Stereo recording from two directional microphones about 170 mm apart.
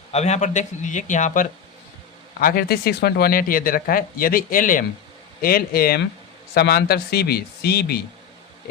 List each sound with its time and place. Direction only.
0.1 s speech: 40° left (ahead or behind); by 8.0 s 70° left (ahead or behind)